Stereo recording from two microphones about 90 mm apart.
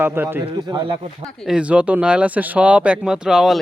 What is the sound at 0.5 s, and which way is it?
Speech, 60° right (ahead or behind).